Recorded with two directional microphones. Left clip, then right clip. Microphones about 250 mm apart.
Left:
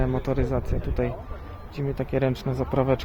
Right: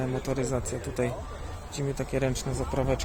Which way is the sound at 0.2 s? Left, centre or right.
Centre.